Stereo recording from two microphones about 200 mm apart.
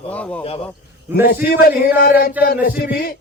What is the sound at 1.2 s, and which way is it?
A man's voice, 45° left (ahead or behind).